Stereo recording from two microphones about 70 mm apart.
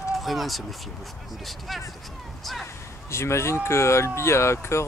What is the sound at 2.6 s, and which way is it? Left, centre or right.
Speech, left.